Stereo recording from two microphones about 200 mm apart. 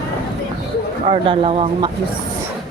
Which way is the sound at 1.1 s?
25° right (ahead or behind).